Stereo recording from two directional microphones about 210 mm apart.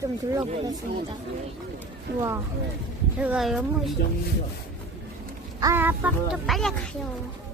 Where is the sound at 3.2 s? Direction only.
5° right (ahead or behind).